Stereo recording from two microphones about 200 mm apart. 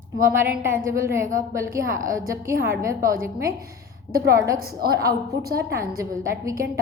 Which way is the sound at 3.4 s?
50° right (ahead or behind).